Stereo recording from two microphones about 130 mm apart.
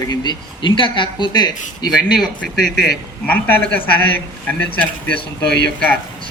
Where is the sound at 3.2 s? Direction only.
15° left (ahead or behind).